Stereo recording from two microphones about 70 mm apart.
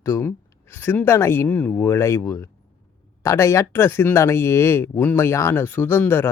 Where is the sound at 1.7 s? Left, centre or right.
Left.